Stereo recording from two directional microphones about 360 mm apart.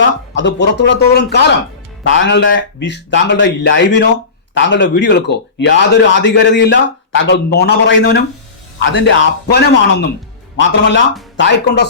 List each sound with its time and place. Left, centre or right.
0.3 s a man's voice: left